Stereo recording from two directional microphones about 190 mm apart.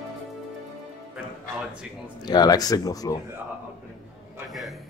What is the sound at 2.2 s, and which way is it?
Speech, 20° left (ahead or behind).